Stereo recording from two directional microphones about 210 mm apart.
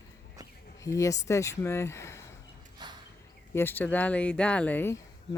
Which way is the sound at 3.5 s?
10° left (ahead or behind).